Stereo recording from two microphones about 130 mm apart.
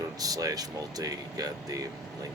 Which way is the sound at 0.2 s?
30° right (ahead or behind).